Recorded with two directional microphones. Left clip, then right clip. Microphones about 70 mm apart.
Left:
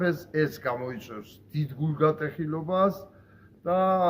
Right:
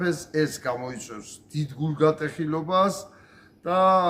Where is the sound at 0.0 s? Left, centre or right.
Centre.